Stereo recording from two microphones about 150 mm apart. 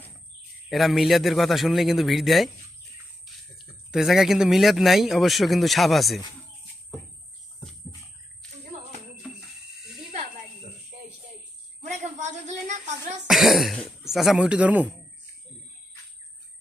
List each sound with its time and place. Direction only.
0.7 s speech: centre (ahead or behind)
3.6 s speech: centre (ahead or behind)
9.2 s a sound: centre (ahead or behind)
11.8 s a sound: 50° right (ahead or behind)
12.6 s a woman's voice: 50° right (ahead or behind)
13.2 s speech: centre (ahead or behind)